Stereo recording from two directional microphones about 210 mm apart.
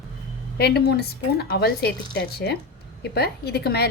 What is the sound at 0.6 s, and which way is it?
A woman's voice, 50° left (ahead or behind).